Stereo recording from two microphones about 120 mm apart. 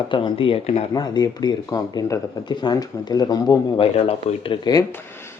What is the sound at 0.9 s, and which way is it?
Speech, 35° left (ahead or behind).